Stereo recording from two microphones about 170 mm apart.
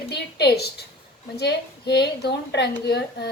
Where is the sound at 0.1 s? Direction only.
75° left (ahead or behind).